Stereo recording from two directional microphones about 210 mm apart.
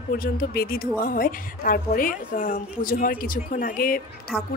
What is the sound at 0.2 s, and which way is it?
A woman's voice, 45° left (ahead or behind).